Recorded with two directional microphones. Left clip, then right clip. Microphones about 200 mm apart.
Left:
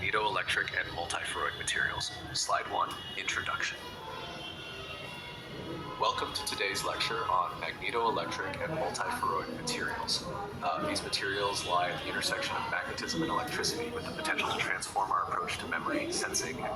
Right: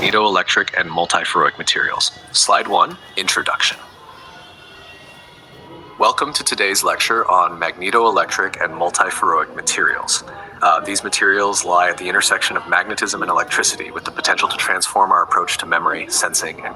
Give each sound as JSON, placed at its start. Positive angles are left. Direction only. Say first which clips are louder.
{"t": 0.0, "sound": "speech", "louder": "right 16 dB", "side_deg": -45}
{"t": 6.0, "sound": "speech", "louder": "right 16 dB", "side_deg": -45}
{"t": 10.6, "sound": "speech", "louder": "right 18 dB", "side_deg": -50}